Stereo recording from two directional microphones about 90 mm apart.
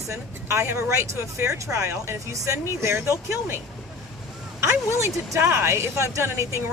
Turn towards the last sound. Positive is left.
turn(degrees=-30)  # may be behind; listen again after turning